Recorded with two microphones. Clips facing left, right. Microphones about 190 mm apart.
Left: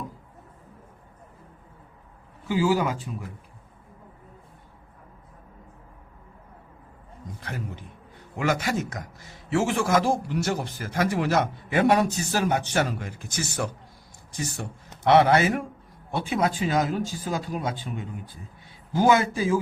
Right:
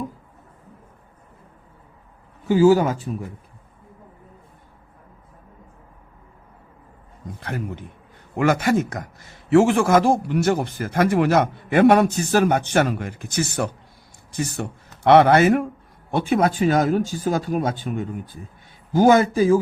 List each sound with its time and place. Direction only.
2.5 s speech: 45° right (ahead or behind)
8.4 s a man's voice: 55° right (ahead or behind)